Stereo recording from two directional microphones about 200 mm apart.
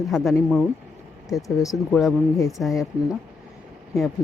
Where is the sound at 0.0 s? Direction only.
Centre (ahead or behind).